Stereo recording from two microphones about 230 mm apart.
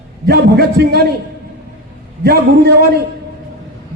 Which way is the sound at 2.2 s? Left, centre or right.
Right.